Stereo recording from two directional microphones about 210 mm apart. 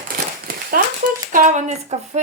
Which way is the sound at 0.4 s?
45° right (ahead or behind).